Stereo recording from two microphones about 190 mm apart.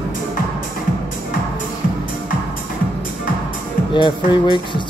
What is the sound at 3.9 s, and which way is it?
Speech, 25° left (ahead or behind).